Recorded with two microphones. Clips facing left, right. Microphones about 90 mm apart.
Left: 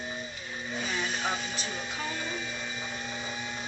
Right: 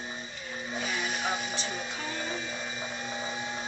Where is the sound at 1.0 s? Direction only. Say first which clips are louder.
Even; 10° right (ahead or behind).